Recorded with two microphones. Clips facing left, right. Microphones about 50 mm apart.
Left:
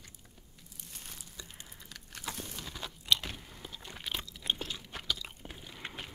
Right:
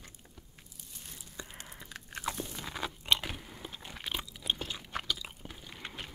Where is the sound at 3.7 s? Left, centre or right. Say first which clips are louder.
Even; centre.